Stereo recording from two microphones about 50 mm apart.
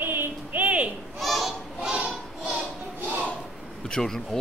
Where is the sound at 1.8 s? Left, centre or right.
Centre.